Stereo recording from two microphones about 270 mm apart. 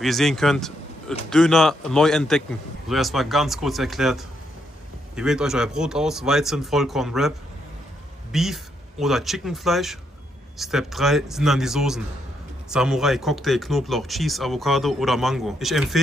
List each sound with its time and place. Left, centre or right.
0.0 s speech: centre